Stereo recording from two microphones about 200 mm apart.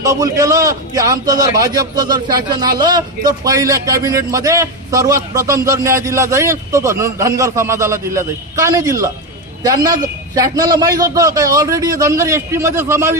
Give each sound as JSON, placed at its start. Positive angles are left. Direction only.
{"t": 0.0, "sound": "a man's voice", "side_deg": -15}